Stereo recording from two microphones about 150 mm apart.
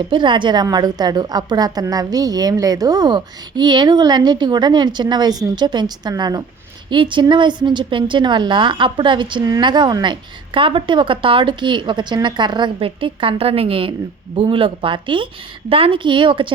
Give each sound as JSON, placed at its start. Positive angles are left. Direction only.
{"t": 0.1, "sound": "a woman's voice", "side_deg": -30}